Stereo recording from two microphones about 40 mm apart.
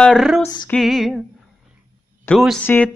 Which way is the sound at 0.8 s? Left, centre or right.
Centre.